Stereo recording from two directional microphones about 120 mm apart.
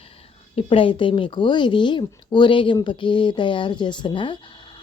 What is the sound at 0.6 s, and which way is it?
Speech, 50° left (ahead or behind).